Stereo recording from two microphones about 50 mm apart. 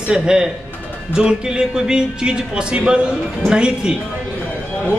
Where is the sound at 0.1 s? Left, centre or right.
Centre.